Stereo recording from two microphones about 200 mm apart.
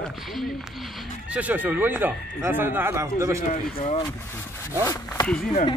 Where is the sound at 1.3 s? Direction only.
5° right (ahead or behind).